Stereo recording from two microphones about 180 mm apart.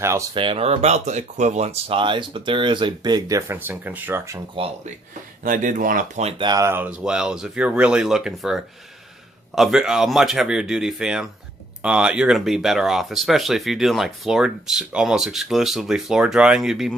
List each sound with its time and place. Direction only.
0.0 s speech: 15° right (ahead or behind)
0.3 s speech: 30° right (ahead or behind); by 4.4 s 10° right (ahead or behind)
4.6 s speech: 30° right (ahead or behind)
5.4 s speech: 50° right (ahead or behind)
6.2 s speech: 25° right (ahead or behind); by 16.9 s centre (ahead or behind)